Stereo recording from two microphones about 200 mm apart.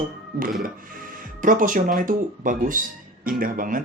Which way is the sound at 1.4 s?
40° right (ahead or behind).